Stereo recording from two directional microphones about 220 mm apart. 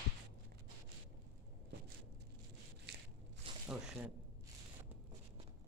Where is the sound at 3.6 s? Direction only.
5° right (ahead or behind).